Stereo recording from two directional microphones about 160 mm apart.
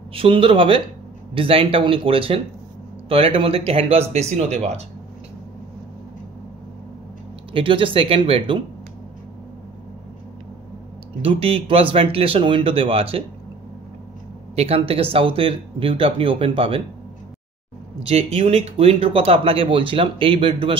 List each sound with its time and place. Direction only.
0.1 s speech: 35° right (ahead or behind)
7.5 s speech: 35° right (ahead or behind)
11.2 s speech: 35° right (ahead or behind)
14.5 s speech: 40° right (ahead or behind)
18.0 s speech: 40° right (ahead or behind)